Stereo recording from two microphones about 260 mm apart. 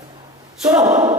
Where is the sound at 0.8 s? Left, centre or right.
Right.